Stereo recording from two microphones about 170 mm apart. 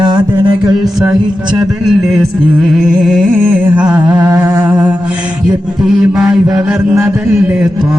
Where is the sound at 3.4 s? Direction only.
10° right (ahead or behind).